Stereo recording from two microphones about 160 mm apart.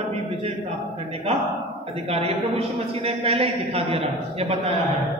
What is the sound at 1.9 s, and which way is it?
A man's voice, 40° right (ahead or behind).